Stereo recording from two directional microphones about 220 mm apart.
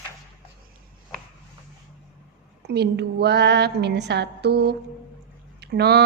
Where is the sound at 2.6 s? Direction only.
50° right (ahead or behind).